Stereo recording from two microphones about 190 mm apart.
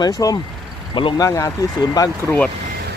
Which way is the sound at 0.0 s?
20° left (ahead or behind).